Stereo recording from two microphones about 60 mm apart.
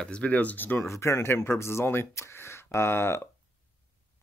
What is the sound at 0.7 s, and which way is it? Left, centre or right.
Speech, left.